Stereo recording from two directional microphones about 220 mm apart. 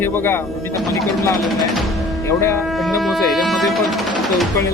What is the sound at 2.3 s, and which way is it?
Speech, 10° left (ahead or behind).